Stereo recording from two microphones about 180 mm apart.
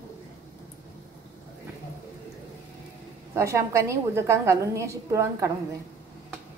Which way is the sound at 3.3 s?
15° right (ahead or behind).